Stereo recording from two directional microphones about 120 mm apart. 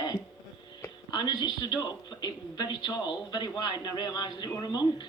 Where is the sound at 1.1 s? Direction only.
35° left (ahead or behind).